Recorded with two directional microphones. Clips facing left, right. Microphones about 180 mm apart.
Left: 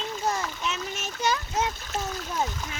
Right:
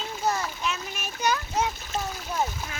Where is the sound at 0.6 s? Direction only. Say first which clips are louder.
Even; 25° left (ahead or behind).